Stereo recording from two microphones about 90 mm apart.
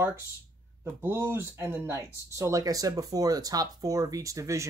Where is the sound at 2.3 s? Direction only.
35° right (ahead or behind).